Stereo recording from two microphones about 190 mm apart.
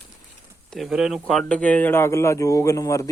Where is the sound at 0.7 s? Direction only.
Centre (ahead or behind).